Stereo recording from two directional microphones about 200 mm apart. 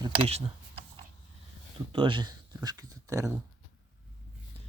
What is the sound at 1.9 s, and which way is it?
Speech, 25° right (ahead or behind).